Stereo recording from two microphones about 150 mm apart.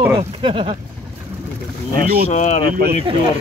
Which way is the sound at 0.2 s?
35° right (ahead or behind).